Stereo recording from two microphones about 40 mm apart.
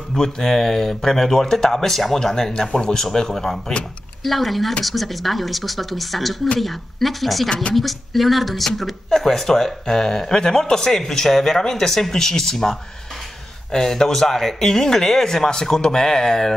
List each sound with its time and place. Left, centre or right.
0.1 s speech: centre
4.2 s speech: centre
7.4 s speech: left
7.7 s speech: centre